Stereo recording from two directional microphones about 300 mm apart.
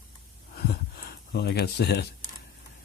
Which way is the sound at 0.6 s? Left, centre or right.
Left.